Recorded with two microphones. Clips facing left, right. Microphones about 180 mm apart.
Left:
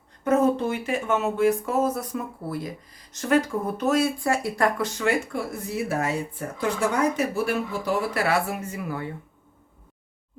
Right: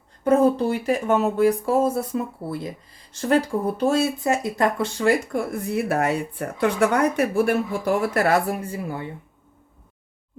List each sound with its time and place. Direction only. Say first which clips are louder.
0.3 s speech: right 3 dB; 35° right (ahead or behind)
5.3 s speech: right 5 dB; 60° right (ahead or behind); by 9.0 s 25° right (ahead or behind)